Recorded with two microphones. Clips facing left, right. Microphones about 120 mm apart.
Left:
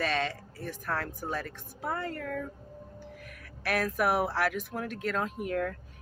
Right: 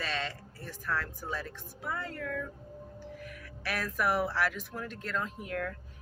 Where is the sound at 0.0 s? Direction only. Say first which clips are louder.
Left 6 dB; 55° left (ahead or behind).